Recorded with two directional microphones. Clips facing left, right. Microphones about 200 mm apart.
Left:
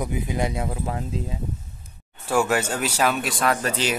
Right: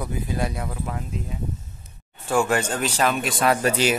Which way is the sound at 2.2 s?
5° left (ahead or behind).